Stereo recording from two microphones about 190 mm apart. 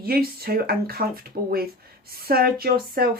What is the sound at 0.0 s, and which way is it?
Speech, 55° right (ahead or behind).